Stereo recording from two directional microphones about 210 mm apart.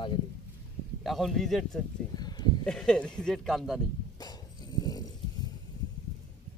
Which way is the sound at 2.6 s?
5° left (ahead or behind).